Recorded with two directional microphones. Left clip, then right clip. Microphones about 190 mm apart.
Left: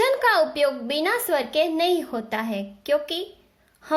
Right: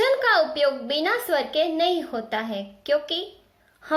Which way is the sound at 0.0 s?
35° left (ahead or behind).